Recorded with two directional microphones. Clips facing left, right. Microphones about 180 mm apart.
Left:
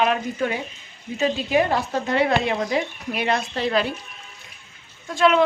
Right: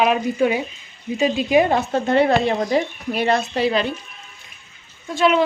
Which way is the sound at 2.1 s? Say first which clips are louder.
Right 4 dB; 35° right (ahead or behind).